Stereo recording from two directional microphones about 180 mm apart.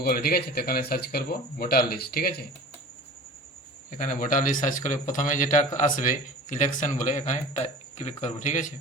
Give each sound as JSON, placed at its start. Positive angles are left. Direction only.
{"t": 0.0, "sound": "speech", "side_deg": 60}
{"t": 3.9, "sound": "speech", "side_deg": 45}